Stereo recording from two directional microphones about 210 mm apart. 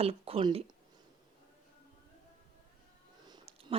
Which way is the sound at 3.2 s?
25° right (ahead or behind).